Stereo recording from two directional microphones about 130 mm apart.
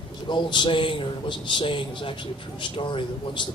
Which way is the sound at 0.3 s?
35° left (ahead or behind).